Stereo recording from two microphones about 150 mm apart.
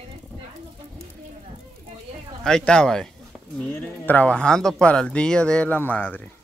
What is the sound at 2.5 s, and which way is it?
Speech, 5° left (ahead or behind).